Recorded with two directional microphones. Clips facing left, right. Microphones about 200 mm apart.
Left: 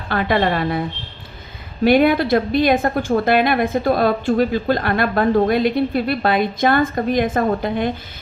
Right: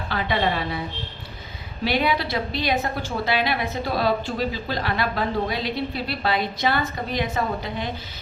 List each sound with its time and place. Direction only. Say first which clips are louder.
0.1 s a woman's voice: left 6 dB; 55° left (ahead or behind)